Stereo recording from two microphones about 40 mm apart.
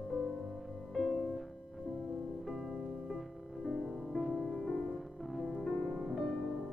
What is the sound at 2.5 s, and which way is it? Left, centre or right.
Music, centre.